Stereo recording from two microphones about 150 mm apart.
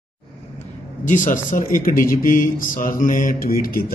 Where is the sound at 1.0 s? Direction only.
60° left (ahead or behind).